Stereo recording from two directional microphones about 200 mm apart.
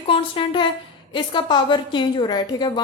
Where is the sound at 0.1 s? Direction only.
25° left (ahead or behind).